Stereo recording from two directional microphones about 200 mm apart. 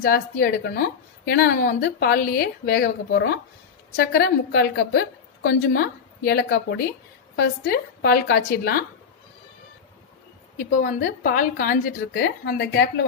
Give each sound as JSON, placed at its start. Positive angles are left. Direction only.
{"t": 0.0, "sound": "a woman's voice", "side_deg": 50}
{"t": 10.6, "sound": "a woman's voice", "side_deg": 40}